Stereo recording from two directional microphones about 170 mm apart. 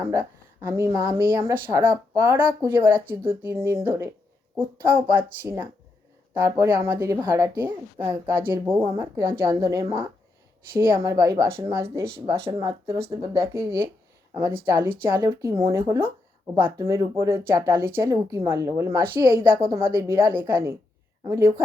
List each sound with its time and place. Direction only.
0.0 s speech: 15° right (ahead or behind)